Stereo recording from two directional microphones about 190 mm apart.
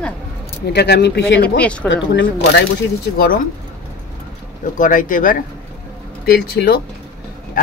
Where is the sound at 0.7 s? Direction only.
60° left (ahead or behind).